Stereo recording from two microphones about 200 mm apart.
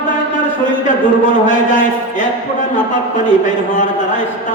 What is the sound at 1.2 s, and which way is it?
Speech, 40° left (ahead or behind).